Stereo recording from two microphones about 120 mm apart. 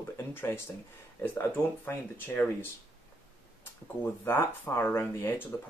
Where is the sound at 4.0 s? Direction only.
15° left (ahead or behind).